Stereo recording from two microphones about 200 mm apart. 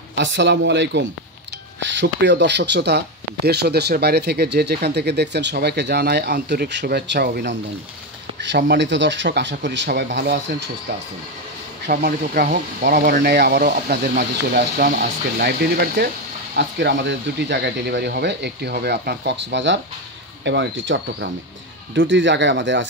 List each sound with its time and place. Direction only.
0.1 s speech: 65° right (ahead or behind)
11.9 s speech: 50° right (ahead or behind)